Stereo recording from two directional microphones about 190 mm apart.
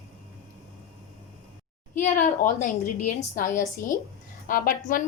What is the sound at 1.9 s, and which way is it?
A woman's voice, 45° left (ahead or behind).